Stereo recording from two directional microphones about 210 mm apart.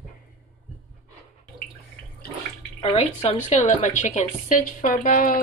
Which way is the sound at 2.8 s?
30° left (ahead or behind).